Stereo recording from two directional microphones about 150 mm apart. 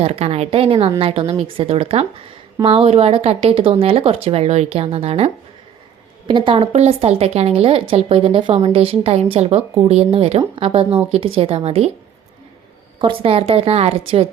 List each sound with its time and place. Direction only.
0.0 s speech: 40° right (ahead or behind)
13.0 s speech: 40° right (ahead or behind)